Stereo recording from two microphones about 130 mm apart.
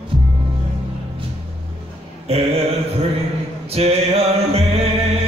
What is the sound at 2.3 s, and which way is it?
Mantra, 50° right (ahead or behind).